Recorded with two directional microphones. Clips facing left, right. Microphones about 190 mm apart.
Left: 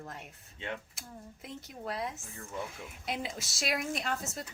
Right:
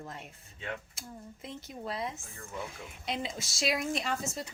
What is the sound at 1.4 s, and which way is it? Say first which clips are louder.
Speech: right 1 dB; centre (ahead or behind).